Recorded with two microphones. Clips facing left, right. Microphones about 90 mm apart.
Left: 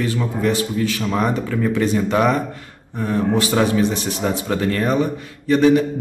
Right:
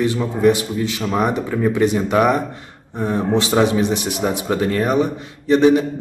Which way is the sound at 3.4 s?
20° right (ahead or behind).